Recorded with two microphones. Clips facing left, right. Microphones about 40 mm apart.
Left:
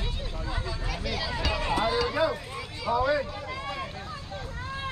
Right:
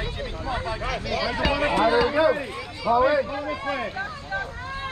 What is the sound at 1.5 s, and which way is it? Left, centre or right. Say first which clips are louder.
Run: right 5 dB; right.